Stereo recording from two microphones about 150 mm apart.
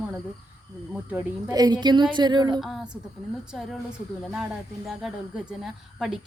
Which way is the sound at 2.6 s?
Centre (ahead or behind).